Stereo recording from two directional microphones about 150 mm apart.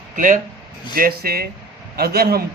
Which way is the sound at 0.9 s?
80° right.